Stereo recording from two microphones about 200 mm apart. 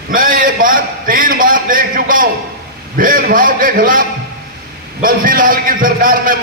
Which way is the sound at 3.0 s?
45° right (ahead or behind).